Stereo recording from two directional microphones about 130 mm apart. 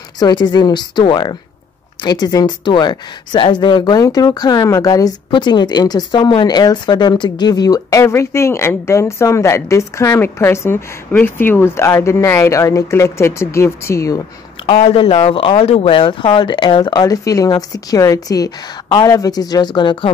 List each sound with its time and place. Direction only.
0.2 s speech: 30° left (ahead or behind)
14.7 s speech: 45° left (ahead or behind)